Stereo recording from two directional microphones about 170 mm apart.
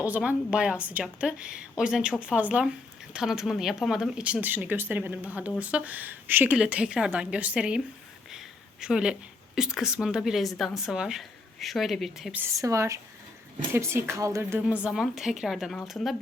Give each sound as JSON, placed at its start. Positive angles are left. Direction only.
{"t": 0.0, "sound": "speech", "side_deg": -10}
{"t": 8.3, "sound": "a sound", "side_deg": -5}
{"t": 9.6, "sound": "speech", "side_deg": -5}
{"t": 12.4, "sound": "speech", "side_deg": -20}